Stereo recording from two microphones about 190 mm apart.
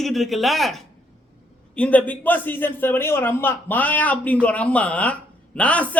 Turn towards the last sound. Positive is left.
turn(degrees=5)  # may be behind; listen again after turning